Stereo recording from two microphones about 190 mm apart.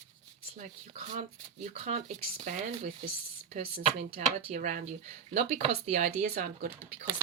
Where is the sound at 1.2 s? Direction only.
35° right (ahead or behind).